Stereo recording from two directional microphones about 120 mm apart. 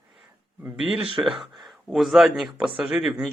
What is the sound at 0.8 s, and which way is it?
Speech, 5° right (ahead or behind).